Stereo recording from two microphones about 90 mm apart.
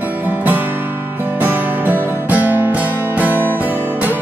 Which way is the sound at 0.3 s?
20° right (ahead or behind).